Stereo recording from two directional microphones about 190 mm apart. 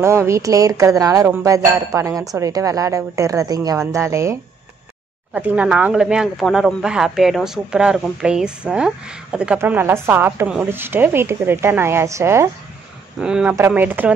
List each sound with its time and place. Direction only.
0.0 s speech: 15° right (ahead or behind)